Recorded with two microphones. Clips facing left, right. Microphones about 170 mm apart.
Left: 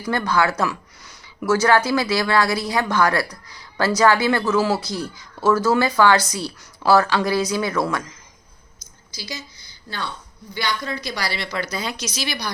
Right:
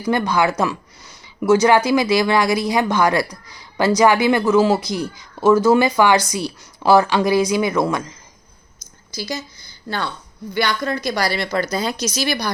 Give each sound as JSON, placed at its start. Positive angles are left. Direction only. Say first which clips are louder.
{"t": 0.0, "sound": "speech", "louder": "right 3 dB", "side_deg": -15}
{"t": 9.1, "sound": "speech", "louder": "right 7 dB", "side_deg": -50}